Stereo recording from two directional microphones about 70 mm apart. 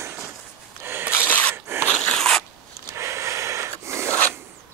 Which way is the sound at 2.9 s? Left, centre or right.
Right.